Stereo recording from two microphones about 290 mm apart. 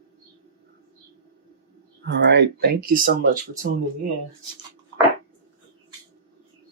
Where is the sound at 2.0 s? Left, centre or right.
Right.